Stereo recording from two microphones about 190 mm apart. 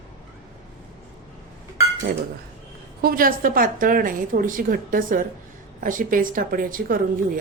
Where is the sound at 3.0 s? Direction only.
50° right (ahead or behind).